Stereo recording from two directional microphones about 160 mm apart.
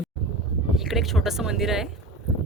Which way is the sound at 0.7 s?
Centre (ahead or behind).